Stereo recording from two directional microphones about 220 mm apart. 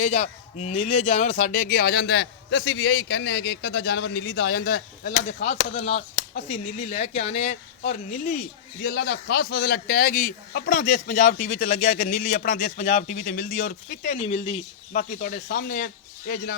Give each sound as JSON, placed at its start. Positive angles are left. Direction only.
{"t": 0.0, "sound": "speech", "side_deg": 30}
{"t": 8.8, "sound": "speech", "side_deg": 45}
{"t": 15.1, "sound": "speech", "side_deg": 40}